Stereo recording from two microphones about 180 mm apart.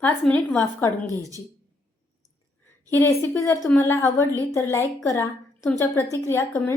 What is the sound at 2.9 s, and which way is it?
A woman's voice, 15° left (ahead or behind).